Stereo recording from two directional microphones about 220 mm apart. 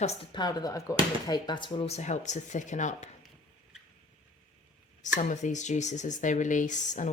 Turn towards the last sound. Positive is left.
turn(degrees=35)  # may be behind; listen again after turning